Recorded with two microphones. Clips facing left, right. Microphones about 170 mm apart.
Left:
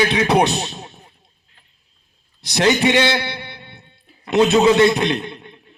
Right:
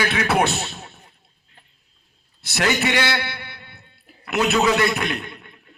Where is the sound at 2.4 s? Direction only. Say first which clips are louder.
Left 6 dB; 20° left (ahead or behind).